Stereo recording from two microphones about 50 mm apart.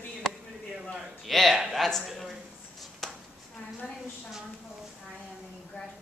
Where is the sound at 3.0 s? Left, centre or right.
Centre.